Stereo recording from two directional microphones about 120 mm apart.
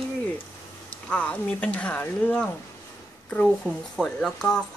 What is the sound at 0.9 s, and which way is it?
Speech, 10° left (ahead or behind).